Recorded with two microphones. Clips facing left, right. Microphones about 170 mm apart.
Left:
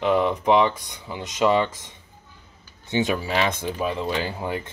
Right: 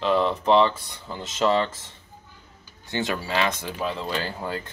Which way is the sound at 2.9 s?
15° left (ahead or behind).